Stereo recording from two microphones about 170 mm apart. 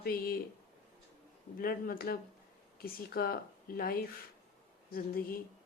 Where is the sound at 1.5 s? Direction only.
60° left (ahead or behind).